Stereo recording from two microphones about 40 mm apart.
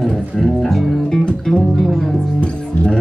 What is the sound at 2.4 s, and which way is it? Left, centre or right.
Music, left.